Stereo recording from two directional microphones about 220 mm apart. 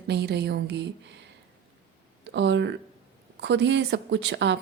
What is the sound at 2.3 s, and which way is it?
Speech, 55° right (ahead or behind).